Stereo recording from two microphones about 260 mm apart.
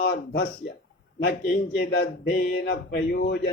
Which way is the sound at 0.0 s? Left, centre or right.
Left.